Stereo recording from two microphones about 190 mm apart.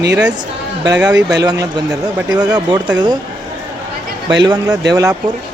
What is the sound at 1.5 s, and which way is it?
Speech, 20° right (ahead or behind).